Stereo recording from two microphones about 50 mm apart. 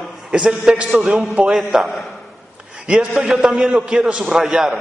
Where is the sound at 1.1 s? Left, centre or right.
Right.